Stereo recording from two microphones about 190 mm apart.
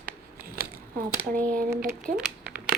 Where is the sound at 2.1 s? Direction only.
45° right (ahead or behind).